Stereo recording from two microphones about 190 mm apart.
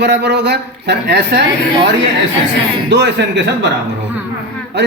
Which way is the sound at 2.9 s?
65° right (ahead or behind).